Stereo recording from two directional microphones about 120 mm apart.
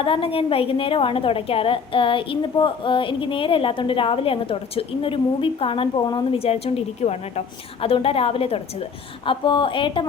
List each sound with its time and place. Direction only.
0.0 s a woman's voice: 50° left (ahead or behind)
6.4 s a woman's voice: 55° left (ahead or behind)